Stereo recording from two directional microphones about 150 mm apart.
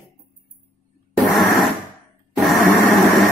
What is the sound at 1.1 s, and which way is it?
Fart, centre (ahead or behind).